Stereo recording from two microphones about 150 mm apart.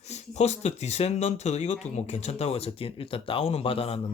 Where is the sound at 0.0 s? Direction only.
50° left (ahead or behind).